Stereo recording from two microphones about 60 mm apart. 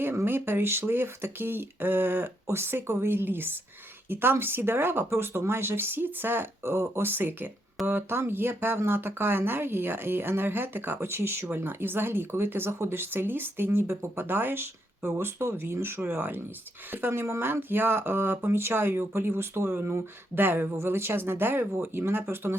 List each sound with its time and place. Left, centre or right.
0.3 s speech: right
7.1 s speech: right
17.1 s speech: right